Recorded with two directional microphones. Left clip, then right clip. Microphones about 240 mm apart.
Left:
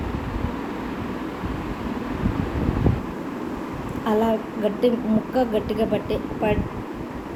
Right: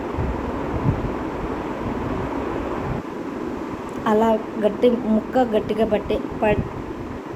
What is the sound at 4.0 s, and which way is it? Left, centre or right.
Speech, centre.